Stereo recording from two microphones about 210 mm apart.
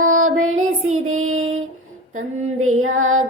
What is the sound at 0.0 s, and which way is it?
Music, 80° right.